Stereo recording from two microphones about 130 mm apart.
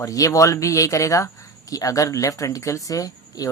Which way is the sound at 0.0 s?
25° left (ahead or behind).